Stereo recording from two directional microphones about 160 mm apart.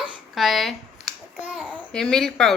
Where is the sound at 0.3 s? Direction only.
Centre (ahead or behind).